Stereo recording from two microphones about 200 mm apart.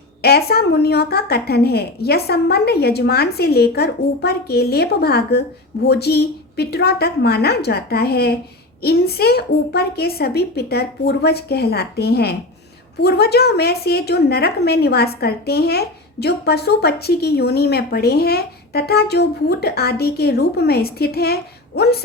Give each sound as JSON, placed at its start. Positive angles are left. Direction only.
{"t": 0.2, "sound": "a woman's voice", "side_deg": 50}